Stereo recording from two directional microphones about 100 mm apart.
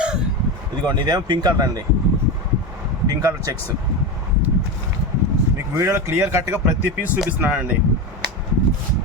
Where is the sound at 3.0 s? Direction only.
35° right (ahead or behind).